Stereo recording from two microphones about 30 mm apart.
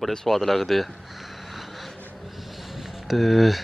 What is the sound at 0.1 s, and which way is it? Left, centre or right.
Speech, centre.